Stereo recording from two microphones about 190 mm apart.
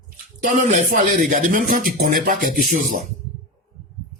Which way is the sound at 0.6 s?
40° right (ahead or behind).